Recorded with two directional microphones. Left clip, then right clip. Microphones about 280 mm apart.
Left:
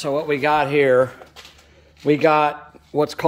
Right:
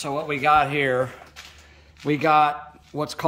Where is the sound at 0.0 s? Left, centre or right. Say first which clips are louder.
Left 3 dB; centre.